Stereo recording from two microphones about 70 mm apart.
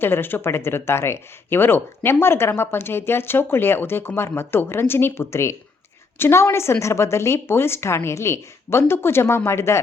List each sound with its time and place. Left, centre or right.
0.0 s a woman's voice: left